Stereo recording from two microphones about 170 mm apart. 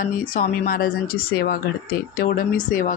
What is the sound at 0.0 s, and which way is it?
A woman's voice, 55° left (ahead or behind).